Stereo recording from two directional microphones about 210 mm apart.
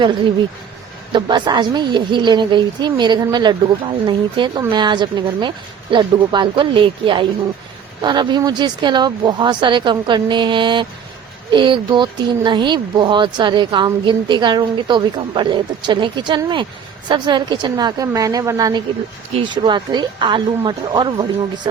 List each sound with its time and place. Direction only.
1.1 s a woman's voice: 20° right (ahead or behind)